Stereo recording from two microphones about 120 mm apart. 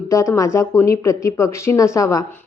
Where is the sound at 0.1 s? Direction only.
25° left (ahead or behind).